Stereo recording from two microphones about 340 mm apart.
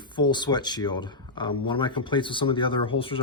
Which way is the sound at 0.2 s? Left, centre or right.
Centre.